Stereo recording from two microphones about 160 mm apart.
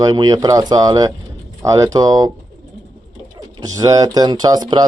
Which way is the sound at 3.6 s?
20° right (ahead or behind).